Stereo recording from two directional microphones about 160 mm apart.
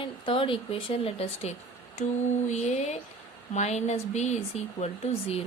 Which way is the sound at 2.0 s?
50° left (ahead or behind).